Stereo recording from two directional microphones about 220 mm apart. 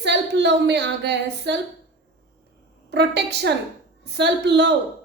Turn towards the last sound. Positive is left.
turn(degrees=-50)  # may be behind; listen again after turning